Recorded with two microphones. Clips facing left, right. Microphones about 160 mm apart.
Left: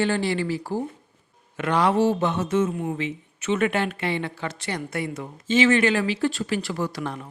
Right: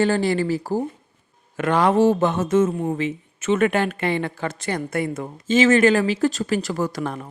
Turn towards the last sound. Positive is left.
turn(degrees=-50)  # may be behind; listen again after turning